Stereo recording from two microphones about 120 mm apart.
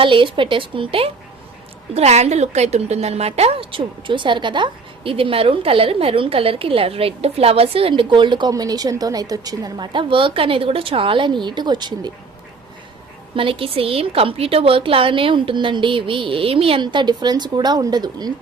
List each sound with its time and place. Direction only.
0.0 s a woman's voice: 45° right (ahead or behind)
2.0 s a woman's voice: 65° right (ahead or behind); by 12.1 s 35° right (ahead or behind)
13.3 s a woman's voice: 50° right (ahead or behind)
16.8 s a woman's voice: 40° right (ahead or behind)